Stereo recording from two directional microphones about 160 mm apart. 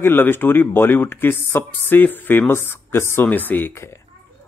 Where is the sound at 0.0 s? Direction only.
15° left (ahead or behind).